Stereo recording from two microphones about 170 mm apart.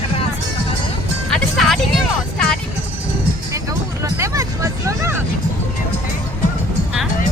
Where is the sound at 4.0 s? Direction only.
20° right (ahead or behind).